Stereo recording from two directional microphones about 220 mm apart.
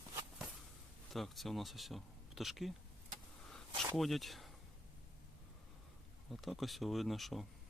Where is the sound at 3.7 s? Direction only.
20° right (ahead or behind).